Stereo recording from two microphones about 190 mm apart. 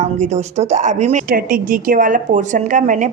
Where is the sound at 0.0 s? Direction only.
35° right (ahead or behind).